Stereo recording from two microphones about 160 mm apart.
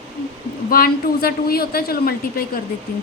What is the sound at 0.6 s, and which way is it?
A woman's voice, 65° left (ahead or behind).